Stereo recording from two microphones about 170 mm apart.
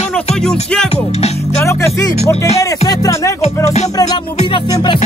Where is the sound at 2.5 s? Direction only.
20° left (ahead or behind).